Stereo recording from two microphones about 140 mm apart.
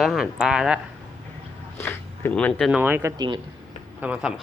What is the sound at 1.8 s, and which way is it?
Speech, 15° left (ahead or behind).